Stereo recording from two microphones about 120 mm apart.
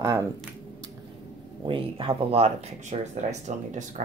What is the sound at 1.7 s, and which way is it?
Speech, 45° right (ahead or behind).